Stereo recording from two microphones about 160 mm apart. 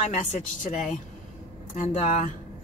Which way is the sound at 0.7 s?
50° left (ahead or behind).